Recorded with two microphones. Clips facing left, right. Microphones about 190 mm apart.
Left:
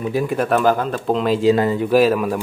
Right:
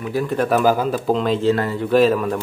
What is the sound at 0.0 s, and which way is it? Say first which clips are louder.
Speech: left 2 dB; 15° left (ahead or behind).